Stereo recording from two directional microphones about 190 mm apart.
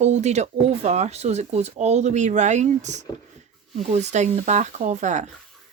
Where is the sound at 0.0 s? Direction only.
35° right (ahead or behind).